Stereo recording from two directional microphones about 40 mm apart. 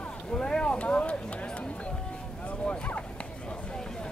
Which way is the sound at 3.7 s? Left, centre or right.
Centre.